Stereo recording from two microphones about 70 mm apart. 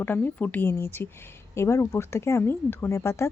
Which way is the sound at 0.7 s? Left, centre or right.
Left.